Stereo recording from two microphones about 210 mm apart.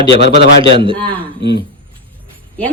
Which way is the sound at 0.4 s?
55° left (ahead or behind).